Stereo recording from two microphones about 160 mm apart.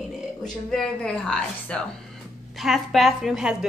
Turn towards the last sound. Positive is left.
turn(degrees=-5)  # may be behind; listen again after turning